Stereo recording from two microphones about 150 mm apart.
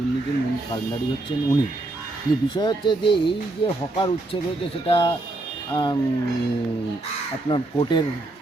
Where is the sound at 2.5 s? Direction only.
30° left (ahead or behind).